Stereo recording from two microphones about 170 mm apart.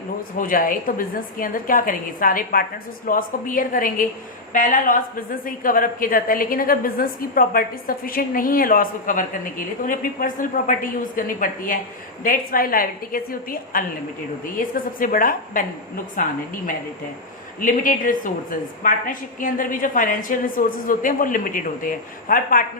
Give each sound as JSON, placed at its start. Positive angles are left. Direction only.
{"t": 0.3, "sound": "a woman's voice", "side_deg": 55}
{"t": 17.6, "sound": "a woman's voice", "side_deg": 50}